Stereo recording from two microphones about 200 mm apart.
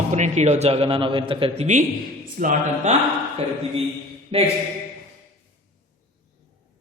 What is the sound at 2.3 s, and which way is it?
Speech, 40° right (ahead or behind).